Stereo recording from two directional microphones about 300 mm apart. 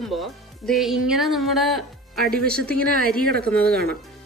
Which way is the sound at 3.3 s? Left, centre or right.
Right.